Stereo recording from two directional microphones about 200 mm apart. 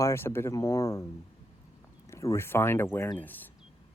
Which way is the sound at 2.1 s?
15° left (ahead or behind).